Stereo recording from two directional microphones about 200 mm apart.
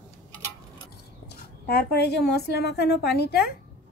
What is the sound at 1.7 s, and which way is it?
A woman's voice, 55° left (ahead or behind).